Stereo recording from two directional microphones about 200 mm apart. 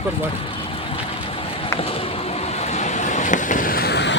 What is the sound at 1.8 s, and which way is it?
Vehicle, 30° left (ahead or behind).